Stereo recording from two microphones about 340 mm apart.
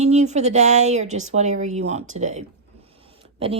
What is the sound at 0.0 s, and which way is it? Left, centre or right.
A woman's voice, centre.